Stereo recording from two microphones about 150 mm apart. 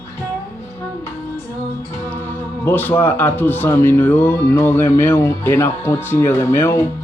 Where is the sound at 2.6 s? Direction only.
10° left (ahead or behind).